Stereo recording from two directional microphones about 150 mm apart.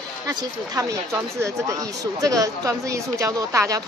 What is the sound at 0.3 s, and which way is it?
Speech, 25° right (ahead or behind).